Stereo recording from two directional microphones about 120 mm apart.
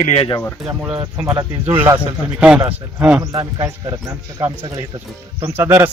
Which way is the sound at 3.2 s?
30° right (ahead or behind).